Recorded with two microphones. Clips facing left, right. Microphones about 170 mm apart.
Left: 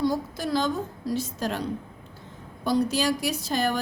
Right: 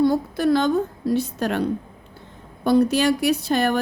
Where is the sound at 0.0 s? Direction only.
60° right (ahead or behind).